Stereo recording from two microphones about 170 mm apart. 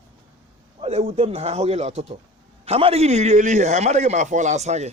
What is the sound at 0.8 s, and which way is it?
A man's voice, 40° right (ahead or behind).